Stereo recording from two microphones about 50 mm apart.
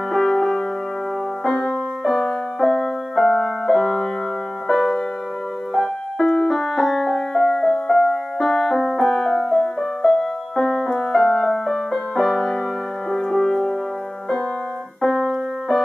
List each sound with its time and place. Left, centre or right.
0.1 s music: centre
15.0 s keyboard: centre